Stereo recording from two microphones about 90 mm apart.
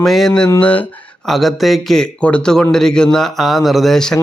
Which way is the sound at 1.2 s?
Centre (ahead or behind).